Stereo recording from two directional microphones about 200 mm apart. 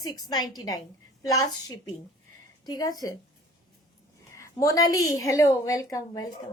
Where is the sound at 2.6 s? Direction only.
20° left (ahead or behind).